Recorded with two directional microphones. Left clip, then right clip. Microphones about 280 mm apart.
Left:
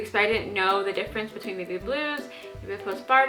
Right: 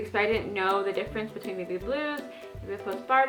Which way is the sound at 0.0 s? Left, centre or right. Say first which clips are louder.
Left 3 dB; centre.